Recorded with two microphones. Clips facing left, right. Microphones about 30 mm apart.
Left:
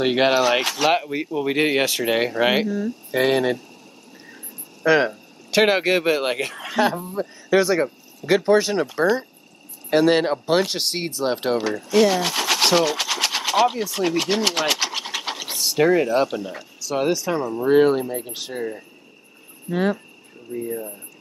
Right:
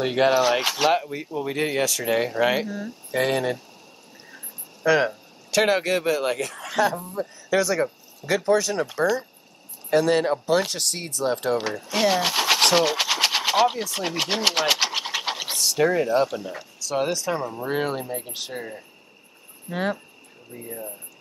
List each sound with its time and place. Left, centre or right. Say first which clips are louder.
0.0 s speech: left 2 dB; left
0.4 s speech: left 2 dB; centre
0.9 s speech: left 3 dB; left
3.1 s speech: left 3 dB; centre
4.8 s a sound: left 2 dB; centre
5.7 s speech: left 3 dB; left
9.8 s speech: left 2 dB; left
11.5 s speech: left 6 dB; centre
15.5 s speech: left 4 dB; centre
16.3 s speech: left 3 dB; centre